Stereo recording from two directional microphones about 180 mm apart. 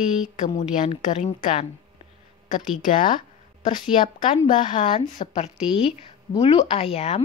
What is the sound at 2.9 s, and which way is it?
Speech, 50° left (ahead or behind).